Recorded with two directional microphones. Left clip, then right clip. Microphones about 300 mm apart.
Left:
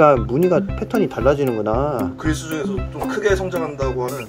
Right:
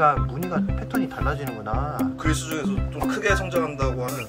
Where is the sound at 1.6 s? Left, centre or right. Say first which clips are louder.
Left 9 dB; left.